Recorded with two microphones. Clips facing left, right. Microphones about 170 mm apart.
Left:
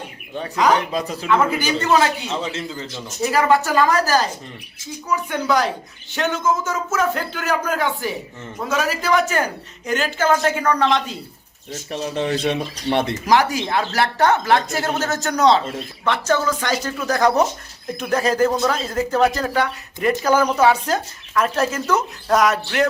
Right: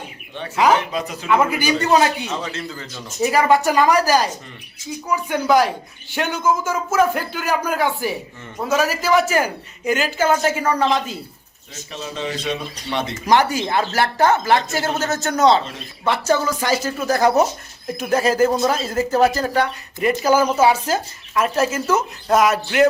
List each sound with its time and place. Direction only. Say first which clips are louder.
0.6 s speech: right 1 dB; 5° right (ahead or behind)
2.4 s speech: left 2 dB; 25° left (ahead or behind)
3.3 s speech: right 1 dB; 15° right (ahead or behind)
11.7 s speech: left 5 dB; 55° left (ahead or behind)
13.2 s speech: right 4 dB; centre (ahead or behind)
18.5 s speech: right 1 dB; 20° right (ahead or behind)
18.8 s speech: right 1 dB; 5° right (ahead or behind)